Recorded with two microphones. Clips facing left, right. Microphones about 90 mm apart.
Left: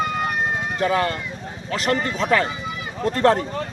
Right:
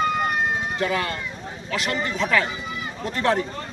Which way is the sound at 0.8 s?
35° left (ahead or behind).